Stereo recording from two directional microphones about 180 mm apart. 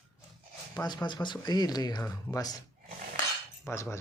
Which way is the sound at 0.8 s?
25° left (ahead or behind).